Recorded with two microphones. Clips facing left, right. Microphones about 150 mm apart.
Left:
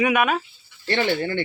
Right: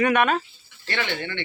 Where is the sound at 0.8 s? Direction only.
35° left (ahead or behind).